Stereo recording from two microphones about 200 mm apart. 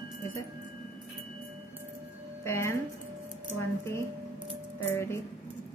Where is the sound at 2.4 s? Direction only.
10° left (ahead or behind).